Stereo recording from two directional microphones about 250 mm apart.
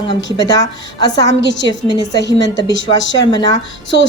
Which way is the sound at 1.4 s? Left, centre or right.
Left.